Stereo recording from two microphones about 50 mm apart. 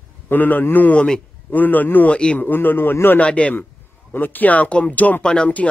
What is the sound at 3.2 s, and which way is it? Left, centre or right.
Speech, left.